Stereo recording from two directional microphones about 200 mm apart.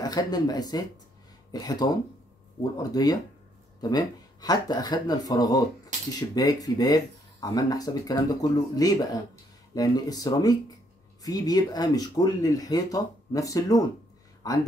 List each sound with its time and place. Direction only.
0.0 s speech: 20° left (ahead or behind)